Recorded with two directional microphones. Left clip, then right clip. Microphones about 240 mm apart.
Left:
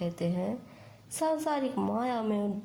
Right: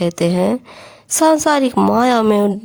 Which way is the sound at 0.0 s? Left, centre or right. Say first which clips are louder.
Right 17 dB; right.